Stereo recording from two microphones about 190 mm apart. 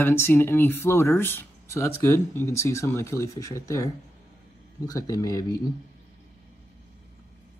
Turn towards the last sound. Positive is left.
turn(degrees=20)  # may be behind; listen again after turning